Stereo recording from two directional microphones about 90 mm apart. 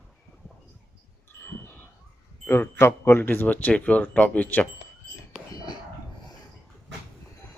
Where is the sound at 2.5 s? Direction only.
30° left (ahead or behind).